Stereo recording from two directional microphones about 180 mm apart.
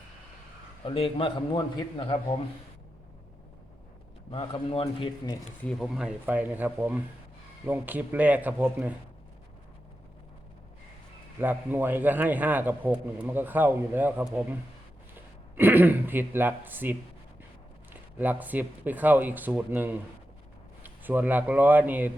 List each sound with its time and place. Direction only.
0.9 s a man's voice: 30° left (ahead or behind)
4.3 s a man's voice: 30° left (ahead or behind)
5.6 s a man's voice: centre (ahead or behind)
11.3 s a man's voice: 10° right (ahead or behind)
15.5 s a man's voice: 10° right (ahead or behind)
18.2 s a man's voice: 10° right (ahead or behind)